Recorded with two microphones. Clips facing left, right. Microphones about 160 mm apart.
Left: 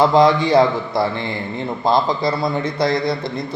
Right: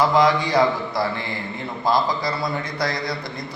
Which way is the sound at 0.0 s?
25° left (ahead or behind).